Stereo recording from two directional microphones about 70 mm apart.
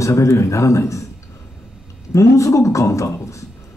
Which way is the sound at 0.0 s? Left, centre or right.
Left.